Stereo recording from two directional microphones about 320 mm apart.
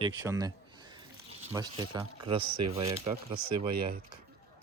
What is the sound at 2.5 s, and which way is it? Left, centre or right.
Speech, right.